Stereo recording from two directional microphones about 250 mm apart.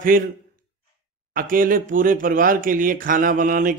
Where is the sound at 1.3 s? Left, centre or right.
Right.